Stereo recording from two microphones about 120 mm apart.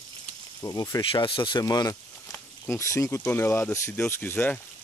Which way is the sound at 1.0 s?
45° left (ahead or behind).